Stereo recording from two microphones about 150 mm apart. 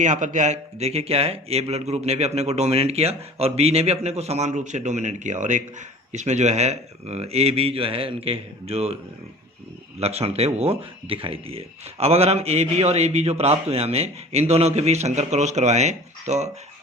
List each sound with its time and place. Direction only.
0.0 s speech: 55° right (ahead or behind)
10.0 s speech: 45° right (ahead or behind)